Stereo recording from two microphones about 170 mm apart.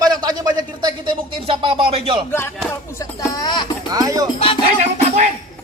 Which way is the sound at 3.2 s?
20° left (ahead or behind).